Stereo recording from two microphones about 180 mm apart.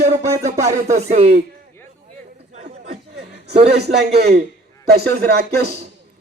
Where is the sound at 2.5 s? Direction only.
40° right (ahead or behind).